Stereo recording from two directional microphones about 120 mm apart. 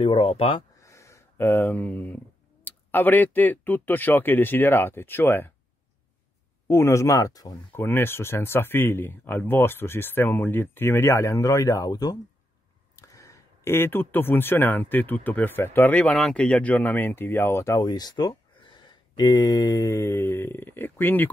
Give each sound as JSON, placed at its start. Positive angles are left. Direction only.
{"t": 0.0, "sound": "speech", "side_deg": 50}
{"t": 0.7, "sound": "speech", "side_deg": 25}
{"t": 6.7, "sound": "speech", "side_deg": 25}
{"t": 7.5, "sound": "speech", "side_deg": 20}